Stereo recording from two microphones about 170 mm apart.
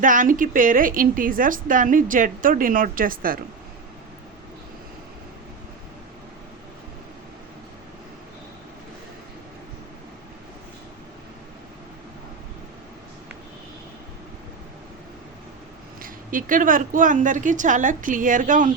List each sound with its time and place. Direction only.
0.0 s a woman's voice: 50° right (ahead or behind)
16.0 s a woman's voice: 55° right (ahead or behind)